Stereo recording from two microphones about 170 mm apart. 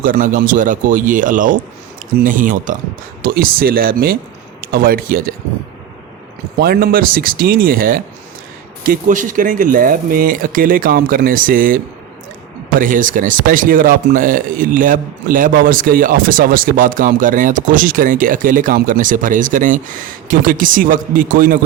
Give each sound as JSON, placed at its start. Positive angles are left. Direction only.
{"t": 0.0, "sound": "speech", "side_deg": -55}
{"t": 3.2, "sound": "speech", "side_deg": -60}
{"t": 6.6, "sound": "speech", "side_deg": -60}
{"t": 12.8, "sound": "speech", "side_deg": -50}